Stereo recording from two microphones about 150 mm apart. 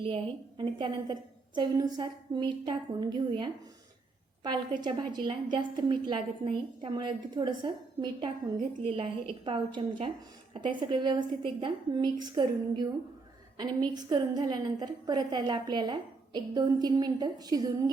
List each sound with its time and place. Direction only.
0.0 s a woman's voice: 35° right (ahead or behind)